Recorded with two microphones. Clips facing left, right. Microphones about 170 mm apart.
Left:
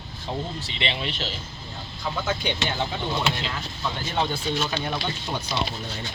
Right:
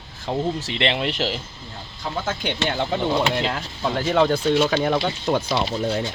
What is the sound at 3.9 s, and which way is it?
Speech, 80° right.